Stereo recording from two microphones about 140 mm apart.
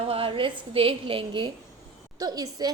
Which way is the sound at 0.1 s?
40° right (ahead or behind).